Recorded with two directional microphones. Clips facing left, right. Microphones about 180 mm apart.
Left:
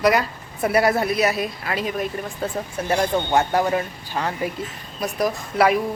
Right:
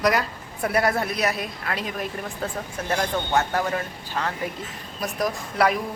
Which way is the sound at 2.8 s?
20° left (ahead or behind).